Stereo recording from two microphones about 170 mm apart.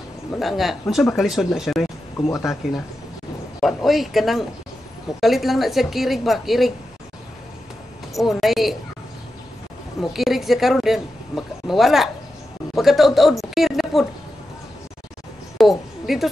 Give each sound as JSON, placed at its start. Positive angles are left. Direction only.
{"t": 0.3, "sound": "a woman's voice", "side_deg": 0}
{"t": 2.1, "sound": "speech", "side_deg": 15}
{"t": 2.6, "sound": "a woman's voice", "side_deg": 0}
{"t": 8.2, "sound": "a woman's voice", "side_deg": 0}
{"t": 9.9, "sound": "a woman's voice", "side_deg": 0}
{"t": 15.5, "sound": "a sound", "side_deg": 0}